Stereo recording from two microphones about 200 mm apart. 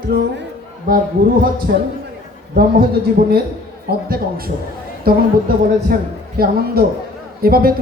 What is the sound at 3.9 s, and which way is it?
A man's voice, 50° right (ahead or behind).